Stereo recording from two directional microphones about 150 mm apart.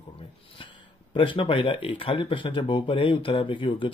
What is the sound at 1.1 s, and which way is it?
Speech, 35° left (ahead or behind).